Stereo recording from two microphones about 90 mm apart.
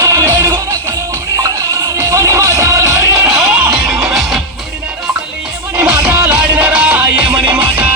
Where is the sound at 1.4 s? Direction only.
40° right (ahead or behind).